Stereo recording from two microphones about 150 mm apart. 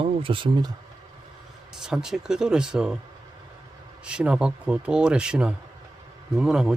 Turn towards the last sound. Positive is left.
turn(degrees=-5)  # may be behind; listen again after turning